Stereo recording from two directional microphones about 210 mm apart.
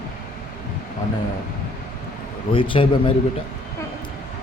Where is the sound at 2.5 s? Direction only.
25° left (ahead or behind).